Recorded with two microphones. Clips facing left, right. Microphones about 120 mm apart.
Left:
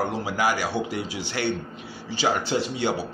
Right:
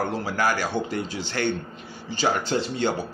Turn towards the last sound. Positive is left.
turn(degrees=10)  # may be behind; listen again after turning